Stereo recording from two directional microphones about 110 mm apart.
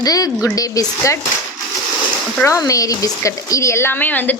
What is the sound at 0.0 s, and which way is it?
A woman's voice, 35° left (ahead or behind).